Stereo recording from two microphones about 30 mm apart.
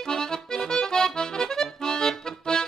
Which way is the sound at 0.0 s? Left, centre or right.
Left.